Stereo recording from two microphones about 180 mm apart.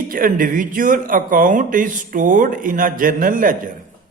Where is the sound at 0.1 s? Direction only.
50° right (ahead or behind).